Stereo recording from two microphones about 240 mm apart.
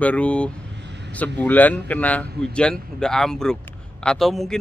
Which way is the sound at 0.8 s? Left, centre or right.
Right.